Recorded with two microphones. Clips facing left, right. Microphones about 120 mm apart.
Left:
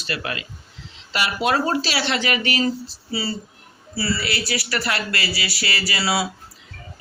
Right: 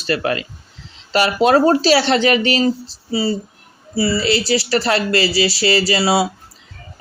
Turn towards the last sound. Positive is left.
turn(degrees=-25)  # may be behind; listen again after turning